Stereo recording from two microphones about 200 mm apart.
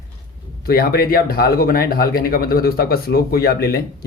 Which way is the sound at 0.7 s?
50° left (ahead or behind).